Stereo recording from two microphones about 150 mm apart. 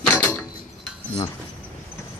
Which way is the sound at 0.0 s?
10° left (ahead or behind).